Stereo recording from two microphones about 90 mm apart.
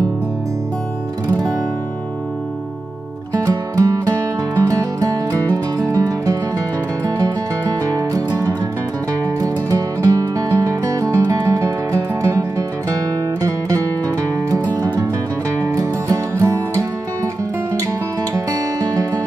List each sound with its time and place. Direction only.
3.4 s music: 40° right (ahead or behind)
9.4 s music: 40° right (ahead or behind)
15.6 s music: 35° right (ahead or behind)